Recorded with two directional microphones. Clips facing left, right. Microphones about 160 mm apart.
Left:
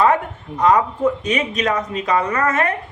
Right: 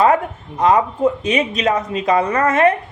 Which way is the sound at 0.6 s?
30° right (ahead or behind).